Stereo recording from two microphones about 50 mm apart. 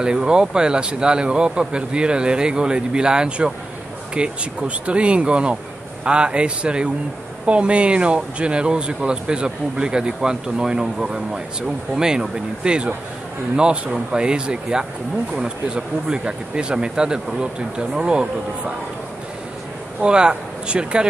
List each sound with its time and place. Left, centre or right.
0.0 s speech: centre
14.1 s speech: centre
20.0 s speech: centre